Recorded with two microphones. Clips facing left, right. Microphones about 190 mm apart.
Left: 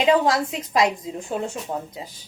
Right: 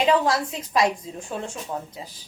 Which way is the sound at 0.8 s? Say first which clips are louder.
Left 1 dB; 20° left (ahead or behind).